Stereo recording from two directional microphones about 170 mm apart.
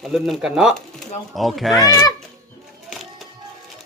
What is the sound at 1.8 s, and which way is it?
Speech, 20° left (ahead or behind).